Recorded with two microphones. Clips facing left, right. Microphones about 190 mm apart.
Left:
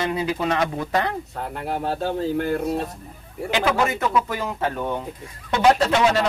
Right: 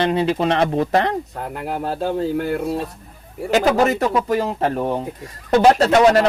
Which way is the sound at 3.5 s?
40° right (ahead or behind).